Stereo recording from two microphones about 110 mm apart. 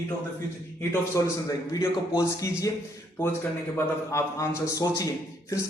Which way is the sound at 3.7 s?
25° left (ahead or behind).